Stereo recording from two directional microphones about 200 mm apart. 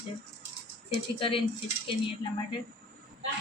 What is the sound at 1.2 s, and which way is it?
Speech, 25° left (ahead or behind).